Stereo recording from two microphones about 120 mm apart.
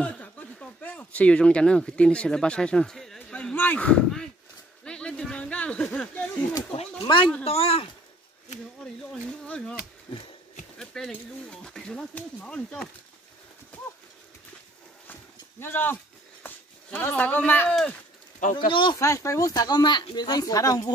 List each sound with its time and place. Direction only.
0.0 s speech: 10° left (ahead or behind)
3.2 s a sound: 10° left (ahead or behind)
4.8 s speech: 10° left (ahead or behind)
6.7 s speech: 50° left (ahead or behind)
7.4 s speech: 55° left (ahead or behind)
9.1 s speech: 10° left (ahead or behind)
10.8 s speech: 5° left (ahead or behind)
15.6 s speech: 20° left (ahead or behind)
18.7 s speech: 40° left (ahead or behind)
18.9 s speech: 25° left (ahead or behind)